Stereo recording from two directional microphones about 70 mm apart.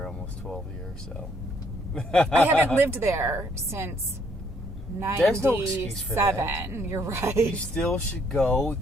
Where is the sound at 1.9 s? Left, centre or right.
Centre.